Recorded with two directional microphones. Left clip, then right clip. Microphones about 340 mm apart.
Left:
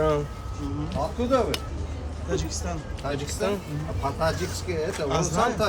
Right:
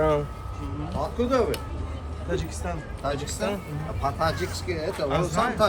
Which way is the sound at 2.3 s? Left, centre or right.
Centre.